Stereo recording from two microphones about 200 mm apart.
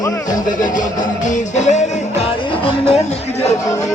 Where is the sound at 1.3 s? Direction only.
35° left (ahead or behind).